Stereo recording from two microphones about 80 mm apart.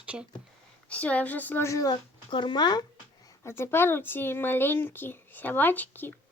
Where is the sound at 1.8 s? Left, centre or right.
Left.